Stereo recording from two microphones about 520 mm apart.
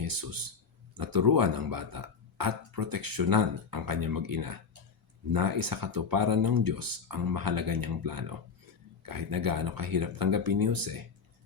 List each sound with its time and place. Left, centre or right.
0.0 s speech: right